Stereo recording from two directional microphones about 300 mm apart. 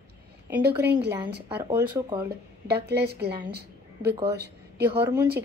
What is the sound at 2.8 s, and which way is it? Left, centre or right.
Speech, right.